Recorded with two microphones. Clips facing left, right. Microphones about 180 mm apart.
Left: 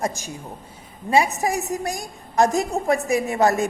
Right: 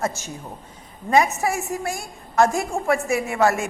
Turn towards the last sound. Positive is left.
turn(degrees=40)  # may be behind; listen again after turning